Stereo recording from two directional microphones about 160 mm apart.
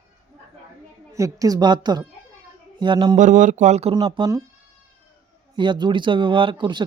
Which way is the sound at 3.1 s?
50° right (ahead or behind).